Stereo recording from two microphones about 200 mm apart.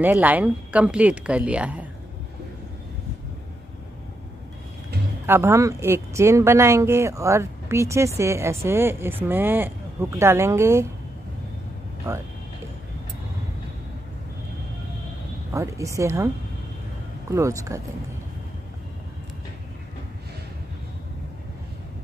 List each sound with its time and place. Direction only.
0.0 s speech: 10° right (ahead or behind)
5.2 s speech: 10° right (ahead or behind)
12.1 s speech: 20° right (ahead or behind)
15.5 s speech: 15° right (ahead or behind)
17.3 s speech: 15° right (ahead or behind)